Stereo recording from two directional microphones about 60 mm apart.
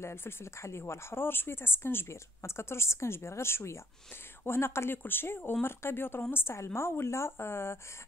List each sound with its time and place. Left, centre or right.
0.0 s speech: left